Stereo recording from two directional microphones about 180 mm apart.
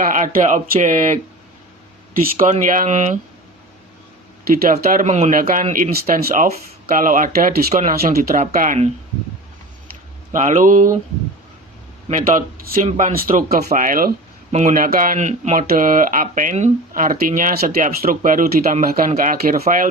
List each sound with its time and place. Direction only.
0.0 s speech: 45° right (ahead or behind)
2.4 s speech: 50° right (ahead or behind)
4.9 s speech: 45° right (ahead or behind)
10.3 s speech: 45° right (ahead or behind)
12.0 s speech: 45° right (ahead or behind)